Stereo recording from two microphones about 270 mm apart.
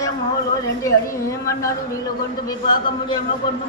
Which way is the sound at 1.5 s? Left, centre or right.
Centre.